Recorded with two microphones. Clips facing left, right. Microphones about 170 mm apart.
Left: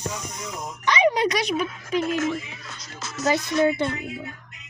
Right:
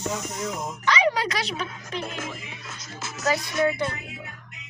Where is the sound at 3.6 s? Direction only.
25° left (ahead or behind).